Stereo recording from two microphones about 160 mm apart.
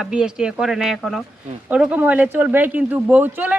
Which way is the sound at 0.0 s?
5° right (ahead or behind).